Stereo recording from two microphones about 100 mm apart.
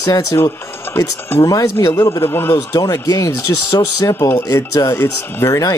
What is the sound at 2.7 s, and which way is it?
Speech, 40° left (ahead or behind).